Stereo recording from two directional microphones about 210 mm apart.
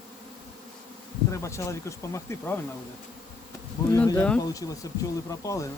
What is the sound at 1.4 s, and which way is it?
Speech, 15° left (ahead or behind).